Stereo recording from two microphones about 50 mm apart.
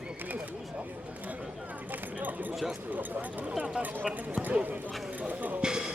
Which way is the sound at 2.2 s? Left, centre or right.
Right.